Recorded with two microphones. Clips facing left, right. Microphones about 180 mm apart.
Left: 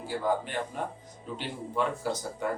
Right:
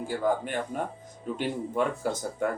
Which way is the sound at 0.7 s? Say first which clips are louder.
Right 3 dB; 50° right (ahead or behind).